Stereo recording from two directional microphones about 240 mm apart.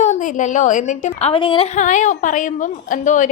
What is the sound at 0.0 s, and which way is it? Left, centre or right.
A woman's voice, left.